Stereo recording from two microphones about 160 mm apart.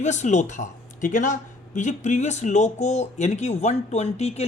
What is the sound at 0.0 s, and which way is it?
Speech, 50° left (ahead or behind).